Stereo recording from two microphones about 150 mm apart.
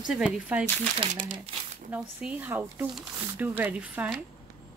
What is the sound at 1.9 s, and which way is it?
A woman's voice, 10° right (ahead or behind).